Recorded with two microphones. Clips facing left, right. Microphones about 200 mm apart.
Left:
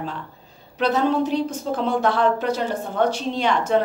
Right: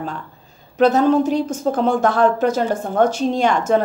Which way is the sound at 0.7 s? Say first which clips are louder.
Right 6 dB; 45° right (ahead or behind).